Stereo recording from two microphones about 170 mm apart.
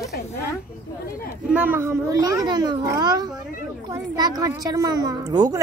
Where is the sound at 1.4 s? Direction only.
10° right (ahead or behind).